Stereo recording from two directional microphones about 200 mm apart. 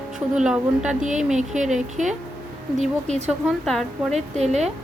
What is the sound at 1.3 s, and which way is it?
Speech, 35° right (ahead or behind).